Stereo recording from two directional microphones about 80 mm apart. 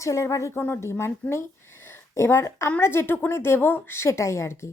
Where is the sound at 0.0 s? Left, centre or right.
Left.